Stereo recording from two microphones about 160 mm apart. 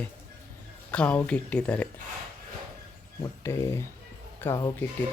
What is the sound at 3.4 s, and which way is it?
Speech, 15° left (ahead or behind).